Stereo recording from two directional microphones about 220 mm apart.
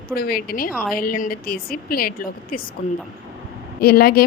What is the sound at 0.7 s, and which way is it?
Speech, 5° right (ahead or behind).